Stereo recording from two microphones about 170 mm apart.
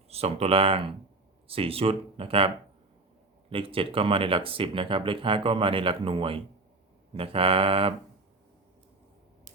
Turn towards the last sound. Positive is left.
turn(degrees=-35)  # may be behind; listen again after turning